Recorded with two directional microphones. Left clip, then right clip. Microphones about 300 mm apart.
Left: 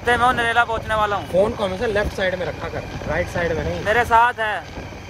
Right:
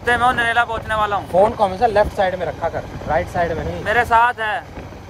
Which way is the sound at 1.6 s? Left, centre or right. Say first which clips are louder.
Right 6 dB; right.